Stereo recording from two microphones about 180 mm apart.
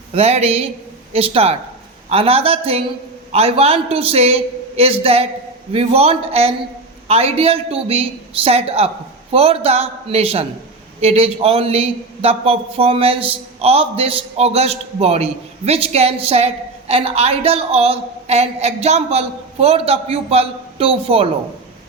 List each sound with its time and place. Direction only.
0.1 s a man's voice: 35° right (ahead or behind)